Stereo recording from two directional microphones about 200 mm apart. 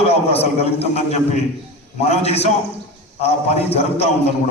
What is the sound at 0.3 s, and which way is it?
A man's voice, 30° left (ahead or behind).